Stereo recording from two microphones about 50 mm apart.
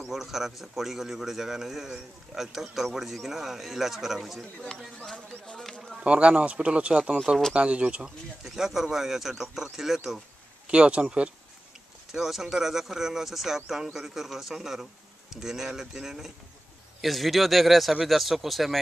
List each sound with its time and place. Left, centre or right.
0.1 s a man's voice: centre
5.6 s speech: centre
6.0 s speech: right
8.5 s a man's voice: centre
10.7 s speech: right
12.1 s a man's voice: centre
17.0 s a man's voice: centre